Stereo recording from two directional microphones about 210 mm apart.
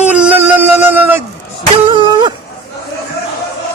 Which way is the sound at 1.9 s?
20° right (ahead or behind).